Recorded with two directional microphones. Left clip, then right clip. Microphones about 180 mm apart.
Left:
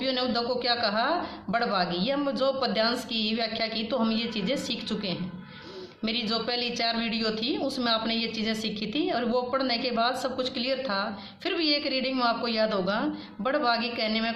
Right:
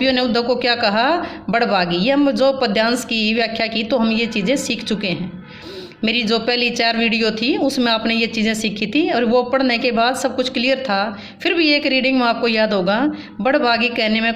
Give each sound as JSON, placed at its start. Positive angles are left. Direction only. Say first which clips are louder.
{"t": 0.0, "sound": "a woman's voice", "louder": "right 10 dB", "side_deg": -35}